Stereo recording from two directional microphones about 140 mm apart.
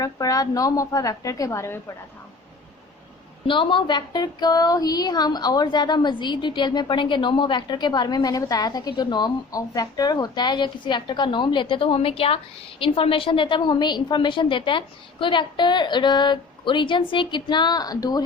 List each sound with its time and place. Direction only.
0.0 s a woman's voice: 25° left (ahead or behind)
3.4 s speech: 35° left (ahead or behind)